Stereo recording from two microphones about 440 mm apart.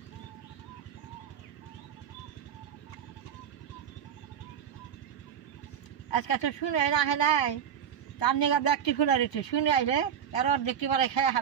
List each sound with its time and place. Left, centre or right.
6.0 s speech: left
8.2 s speech: left